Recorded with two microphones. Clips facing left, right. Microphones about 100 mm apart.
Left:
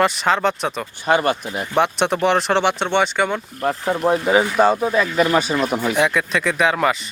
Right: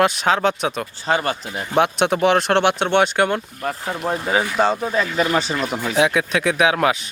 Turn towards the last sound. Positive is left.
turn(degrees=0)  # may be behind; listen again after turning